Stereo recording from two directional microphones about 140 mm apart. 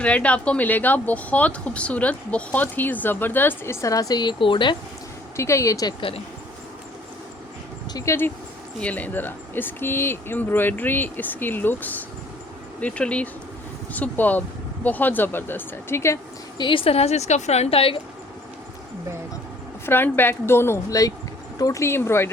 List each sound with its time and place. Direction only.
0.0 s speech: 10° left (ahead or behind); by 4.8 s 35° left (ahead or behind)
5.4 s speech: 20° left (ahead or behind)
6.0 s speech: 40° left (ahead or behind)
7.9 s speech: 20° left (ahead or behind)
16.6 s speech: 35° left (ahead or behind)
19.8 s speech: 15° left (ahead or behind)